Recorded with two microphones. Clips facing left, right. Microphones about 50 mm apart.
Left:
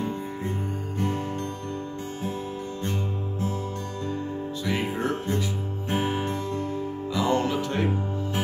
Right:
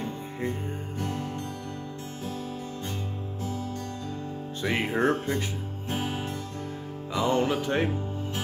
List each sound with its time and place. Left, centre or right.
4.6 s music: right
5.9 s music: left
7.2 s music: right